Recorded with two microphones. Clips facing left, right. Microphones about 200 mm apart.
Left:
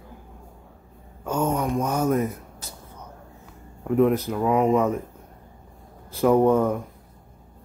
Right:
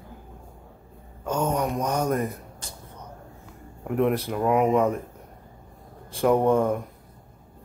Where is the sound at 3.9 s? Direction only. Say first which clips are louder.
Left 4 dB; centre (ahead or behind).